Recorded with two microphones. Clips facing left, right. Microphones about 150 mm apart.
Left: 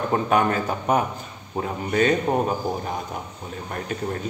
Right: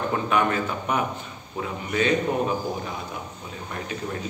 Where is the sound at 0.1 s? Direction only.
40° left (ahead or behind).